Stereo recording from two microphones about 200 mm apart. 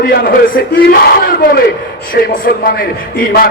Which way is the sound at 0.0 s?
50° left (ahead or behind).